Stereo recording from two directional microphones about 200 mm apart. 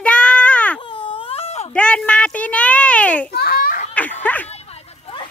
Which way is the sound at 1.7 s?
5° left (ahead or behind).